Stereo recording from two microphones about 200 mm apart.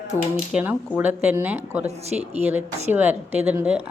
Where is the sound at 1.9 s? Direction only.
30° right (ahead or behind).